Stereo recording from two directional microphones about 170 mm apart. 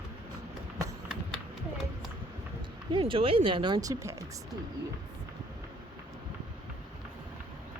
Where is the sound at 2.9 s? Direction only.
30° right (ahead or behind).